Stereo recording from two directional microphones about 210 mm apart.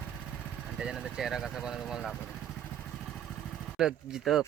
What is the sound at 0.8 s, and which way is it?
Speech, 5° right (ahead or behind).